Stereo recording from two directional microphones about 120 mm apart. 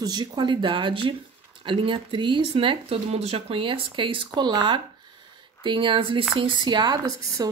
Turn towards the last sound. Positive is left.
turn(degrees=-30)  # may be behind; listen again after turning